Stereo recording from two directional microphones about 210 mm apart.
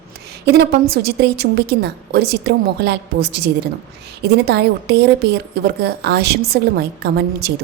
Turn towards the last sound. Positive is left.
turn(degrees=-50)  # may be behind; listen again after turning